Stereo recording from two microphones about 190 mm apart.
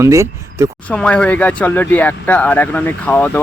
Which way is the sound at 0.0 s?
15° right (ahead or behind).